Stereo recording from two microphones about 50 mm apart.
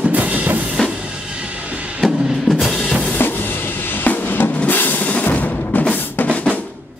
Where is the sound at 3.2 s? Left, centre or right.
Left.